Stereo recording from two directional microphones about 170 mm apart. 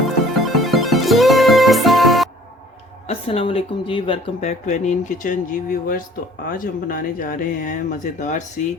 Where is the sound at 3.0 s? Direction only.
35° left (ahead or behind).